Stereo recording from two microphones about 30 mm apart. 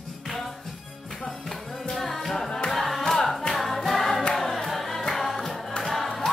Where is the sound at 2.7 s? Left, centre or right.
Centre.